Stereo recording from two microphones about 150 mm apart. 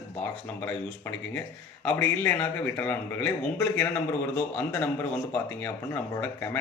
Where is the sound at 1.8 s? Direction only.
10° left (ahead or behind).